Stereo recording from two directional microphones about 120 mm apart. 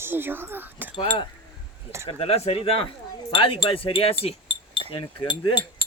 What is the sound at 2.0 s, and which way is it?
Speech, 55° left (ahead or behind).